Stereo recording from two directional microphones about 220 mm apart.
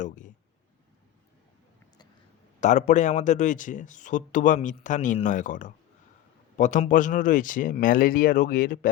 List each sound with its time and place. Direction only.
2.6 s speech: 35° left (ahead or behind)